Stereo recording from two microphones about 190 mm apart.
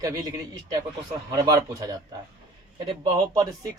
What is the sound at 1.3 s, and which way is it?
Speech, 20° right (ahead or behind).